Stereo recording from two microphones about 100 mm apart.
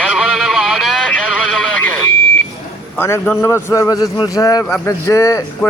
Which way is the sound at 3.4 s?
25° left (ahead or behind).